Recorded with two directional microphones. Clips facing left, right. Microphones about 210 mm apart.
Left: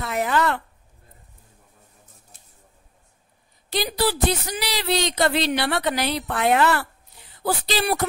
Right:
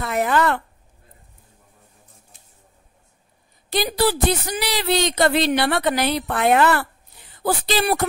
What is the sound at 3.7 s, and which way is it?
Speech, 50° right (ahead or behind).